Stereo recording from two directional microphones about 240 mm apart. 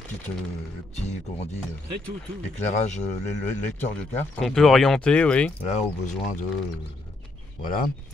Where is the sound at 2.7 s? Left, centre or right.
Left.